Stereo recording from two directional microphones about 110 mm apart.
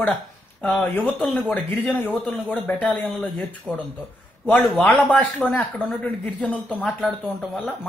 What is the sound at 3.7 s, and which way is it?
Speech, 5° right (ahead or behind).